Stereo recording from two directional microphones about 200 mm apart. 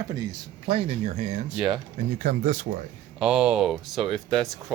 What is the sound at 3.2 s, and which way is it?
Speech, 5° right (ahead or behind).